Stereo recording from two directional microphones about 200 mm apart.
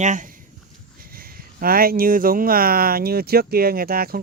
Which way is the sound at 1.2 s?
45° right (ahead or behind).